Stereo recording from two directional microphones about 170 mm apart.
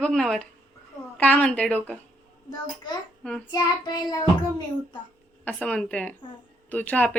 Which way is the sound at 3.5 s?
25° left (ahead or behind).